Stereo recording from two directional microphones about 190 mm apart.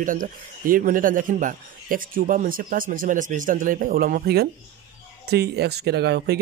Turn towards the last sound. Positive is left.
turn(degrees=-60)  # may be behind; listen again after turning